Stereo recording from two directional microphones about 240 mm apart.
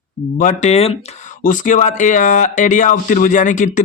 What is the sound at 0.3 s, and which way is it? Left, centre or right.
A man's voice, left.